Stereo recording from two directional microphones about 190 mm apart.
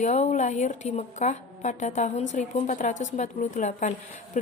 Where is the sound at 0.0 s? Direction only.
40° left (ahead or behind).